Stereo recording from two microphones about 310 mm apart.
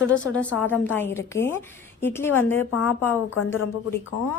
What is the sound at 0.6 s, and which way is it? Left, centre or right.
A woman's voice, centre.